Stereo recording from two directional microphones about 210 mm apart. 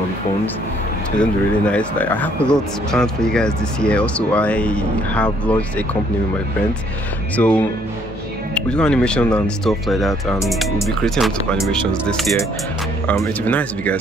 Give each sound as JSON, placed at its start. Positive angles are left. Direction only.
{"t": 1.2, "sound": "speech", "side_deg": 5}
{"t": 7.3, "sound": "speech", "side_deg": 5}